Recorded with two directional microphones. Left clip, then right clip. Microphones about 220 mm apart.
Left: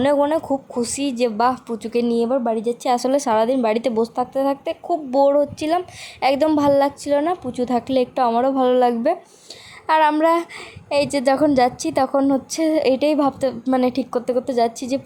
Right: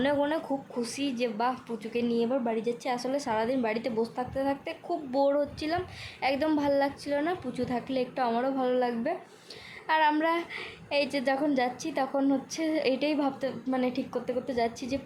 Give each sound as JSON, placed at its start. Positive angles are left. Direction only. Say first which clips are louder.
{"t": 0.0, "sound": "speech", "louder": "left 10 dB", "side_deg": 30}